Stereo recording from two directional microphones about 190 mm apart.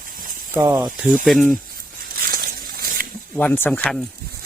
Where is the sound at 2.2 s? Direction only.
50° right (ahead or behind).